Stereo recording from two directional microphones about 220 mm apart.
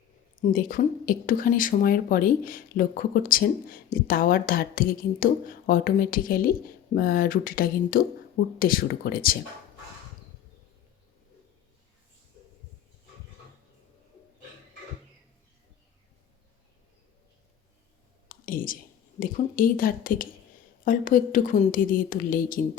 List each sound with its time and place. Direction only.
0.4 s speech: 40° left (ahead or behind)
18.3 s a sound: 40° left (ahead or behind)
19.2 s speech: 40° left (ahead or behind)